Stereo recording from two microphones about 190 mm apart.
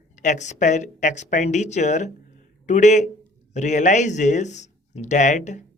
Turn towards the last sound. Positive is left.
turn(degrees=40)  # may be behind; listen again after turning